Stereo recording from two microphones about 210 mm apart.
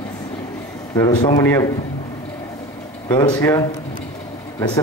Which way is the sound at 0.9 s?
15° left (ahead or behind).